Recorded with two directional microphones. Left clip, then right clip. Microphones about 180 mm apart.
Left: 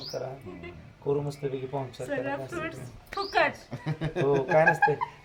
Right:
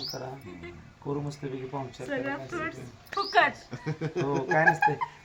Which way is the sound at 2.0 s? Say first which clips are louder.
Right 1 dB; 25° left (ahead or behind).